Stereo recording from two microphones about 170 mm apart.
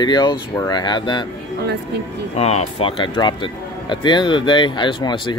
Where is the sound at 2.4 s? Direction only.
40° left (ahead or behind).